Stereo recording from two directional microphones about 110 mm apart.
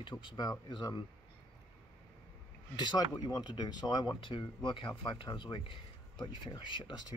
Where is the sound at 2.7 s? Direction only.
40° left (ahead or behind).